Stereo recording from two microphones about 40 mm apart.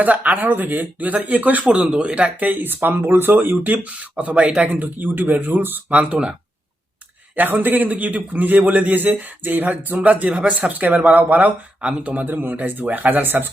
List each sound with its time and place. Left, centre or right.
0.0 s a man's voice: right
0.3 s a man's voice: right
2.4 s speech: right
3.7 s a man's voice: right
4.9 s a man's voice: right
5.9 s speech: right
7.3 s a man's voice: right
11.8 s speech: right
12.1 s a man's voice: right